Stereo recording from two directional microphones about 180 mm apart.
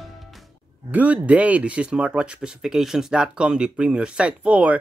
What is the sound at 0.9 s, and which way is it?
Speech, 10° right (ahead or behind).